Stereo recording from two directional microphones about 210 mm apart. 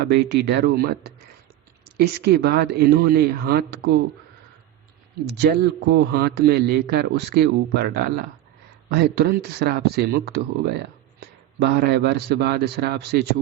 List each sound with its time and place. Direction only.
0.0 s a man's voice: 50° right (ahead or behind)
5.2 s a man's voice: 50° right (ahead or behind)